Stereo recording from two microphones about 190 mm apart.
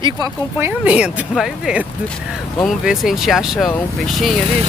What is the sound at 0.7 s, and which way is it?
Speech, 5° right (ahead or behind).